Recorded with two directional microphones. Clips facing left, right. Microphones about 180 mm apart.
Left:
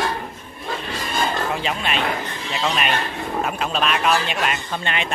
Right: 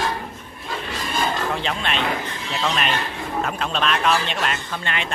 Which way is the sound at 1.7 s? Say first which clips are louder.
Left 1 dB; 5° left (ahead or behind).